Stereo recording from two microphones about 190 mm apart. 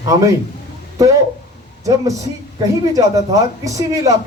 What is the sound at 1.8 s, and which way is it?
Speech, 15° right (ahead or behind).